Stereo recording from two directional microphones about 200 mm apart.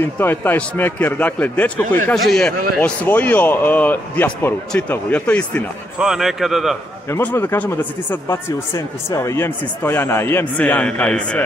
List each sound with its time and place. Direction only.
0.0 s a man's voice: 10° left (ahead or behind)
7.1 s speech: 10° left (ahead or behind)